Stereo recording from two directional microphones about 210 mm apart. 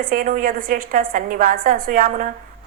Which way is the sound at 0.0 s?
40° right (ahead or behind).